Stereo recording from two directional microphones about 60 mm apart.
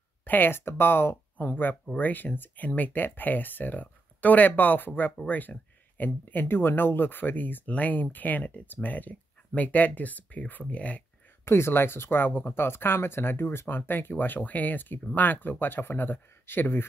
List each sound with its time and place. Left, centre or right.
0.2 s speech: left
11.4 s speech: left